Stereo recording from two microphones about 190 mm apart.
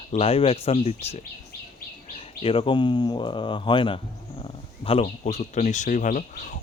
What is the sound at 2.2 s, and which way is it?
Speech, 30° left (ahead or behind).